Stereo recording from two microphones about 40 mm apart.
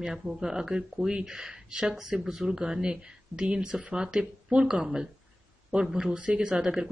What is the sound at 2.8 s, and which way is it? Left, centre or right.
Speech, right.